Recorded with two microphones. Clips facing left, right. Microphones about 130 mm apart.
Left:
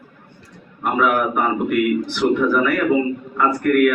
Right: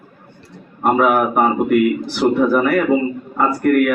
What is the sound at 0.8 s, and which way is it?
A man's voice, 40° right (ahead or behind).